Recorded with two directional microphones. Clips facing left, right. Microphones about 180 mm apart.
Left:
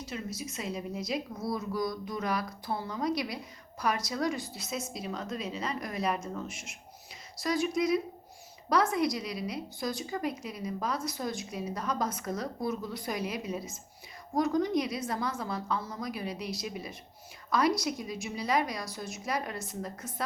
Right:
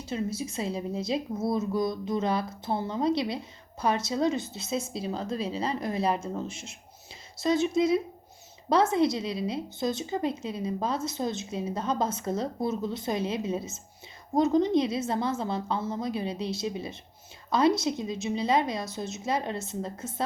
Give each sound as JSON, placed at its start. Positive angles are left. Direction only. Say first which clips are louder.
{"t": 0.0, "sound": "speech", "louder": "right 6 dB", "side_deg": -30}